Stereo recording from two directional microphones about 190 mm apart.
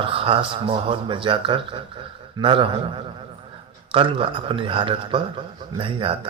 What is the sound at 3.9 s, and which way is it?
A man's voice, 30° right (ahead or behind).